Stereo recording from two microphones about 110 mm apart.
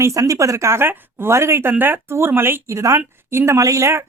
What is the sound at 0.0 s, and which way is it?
A woman's voice, 30° right (ahead or behind).